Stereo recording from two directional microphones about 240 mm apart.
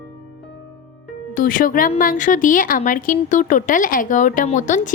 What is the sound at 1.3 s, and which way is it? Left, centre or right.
Speech, left.